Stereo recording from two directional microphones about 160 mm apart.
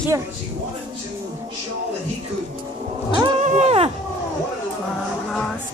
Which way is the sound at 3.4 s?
40° right (ahead or behind).